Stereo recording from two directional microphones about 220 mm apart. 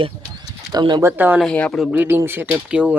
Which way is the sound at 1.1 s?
10° right (ahead or behind).